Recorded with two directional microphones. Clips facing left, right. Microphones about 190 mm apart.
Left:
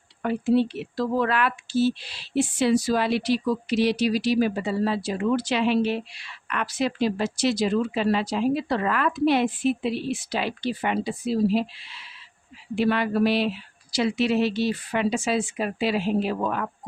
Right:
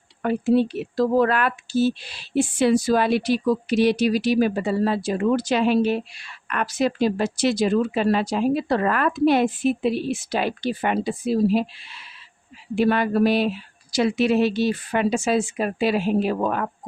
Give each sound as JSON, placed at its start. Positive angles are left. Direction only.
{"t": 0.2, "sound": "speech", "side_deg": -50}
{"t": 12.7, "sound": "speech", "side_deg": -50}